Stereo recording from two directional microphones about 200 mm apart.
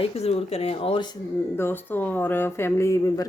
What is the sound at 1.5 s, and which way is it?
Speech, 10° left (ahead or behind).